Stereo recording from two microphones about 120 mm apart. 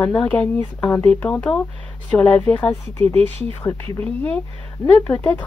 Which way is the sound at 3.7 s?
25° left (ahead or behind).